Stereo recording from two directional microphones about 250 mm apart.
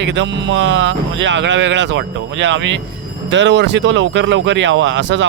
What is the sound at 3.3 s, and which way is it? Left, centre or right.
Speech, right.